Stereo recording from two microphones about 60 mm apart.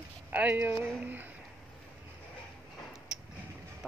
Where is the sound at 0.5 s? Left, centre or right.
Right.